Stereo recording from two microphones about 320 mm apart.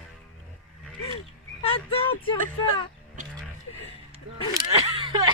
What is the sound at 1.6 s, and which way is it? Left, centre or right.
Speech, centre.